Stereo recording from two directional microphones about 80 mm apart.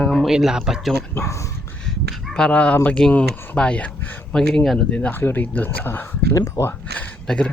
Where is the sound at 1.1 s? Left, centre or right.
Left.